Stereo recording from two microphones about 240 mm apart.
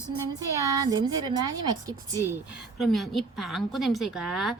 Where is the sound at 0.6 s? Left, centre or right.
Centre.